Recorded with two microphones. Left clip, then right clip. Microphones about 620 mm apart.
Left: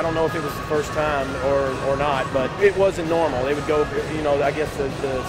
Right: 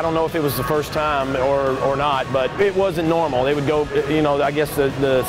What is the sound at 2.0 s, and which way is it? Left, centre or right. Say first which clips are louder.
Speech: right 2 dB; right.